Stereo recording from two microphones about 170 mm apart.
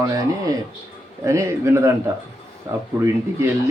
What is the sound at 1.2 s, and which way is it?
Speech, 15° right (ahead or behind).